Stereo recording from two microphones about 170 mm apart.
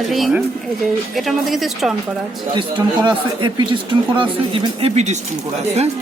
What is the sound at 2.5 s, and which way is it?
Speech, 25° right (ahead or behind).